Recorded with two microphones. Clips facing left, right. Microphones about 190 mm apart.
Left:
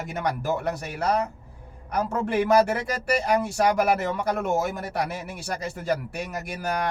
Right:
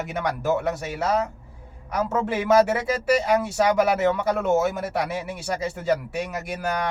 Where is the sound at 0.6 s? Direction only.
Centre (ahead or behind).